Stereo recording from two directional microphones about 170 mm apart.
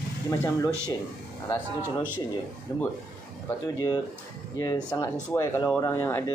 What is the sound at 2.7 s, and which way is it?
Speech, 20° left (ahead or behind).